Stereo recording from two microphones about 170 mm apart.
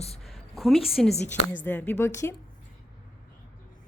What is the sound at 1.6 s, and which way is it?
Speech, 10° left (ahead or behind).